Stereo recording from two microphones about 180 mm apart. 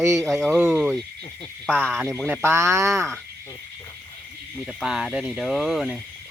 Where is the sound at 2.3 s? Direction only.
15° right (ahead or behind).